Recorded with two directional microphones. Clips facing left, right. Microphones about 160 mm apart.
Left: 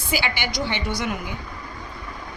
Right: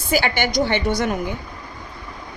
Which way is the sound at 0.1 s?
45° right (ahead or behind).